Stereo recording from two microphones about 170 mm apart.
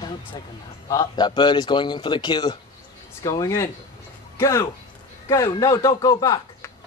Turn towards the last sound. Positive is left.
turn(degrees=20)  # may be behind; listen again after turning